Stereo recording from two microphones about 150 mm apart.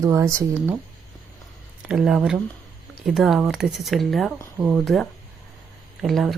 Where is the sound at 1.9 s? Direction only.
5° right (ahead or behind).